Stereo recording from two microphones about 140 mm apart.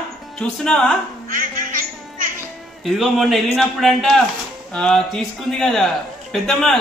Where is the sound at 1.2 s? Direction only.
80° right.